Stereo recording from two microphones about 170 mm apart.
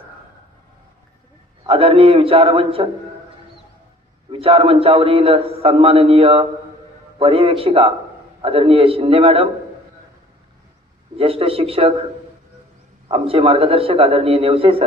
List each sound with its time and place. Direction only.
1.7 s a man's voice: 35° right (ahead or behind)
4.3 s a man's voice: 35° right (ahead or behind)
11.1 s a man's voice: 35° right (ahead or behind)
13.1 s a man's voice: 35° right (ahead or behind)